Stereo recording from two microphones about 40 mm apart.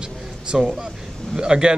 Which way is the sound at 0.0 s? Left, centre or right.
Right.